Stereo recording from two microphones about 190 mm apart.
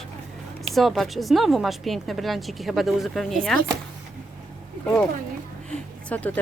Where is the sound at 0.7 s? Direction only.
Centre (ahead or behind).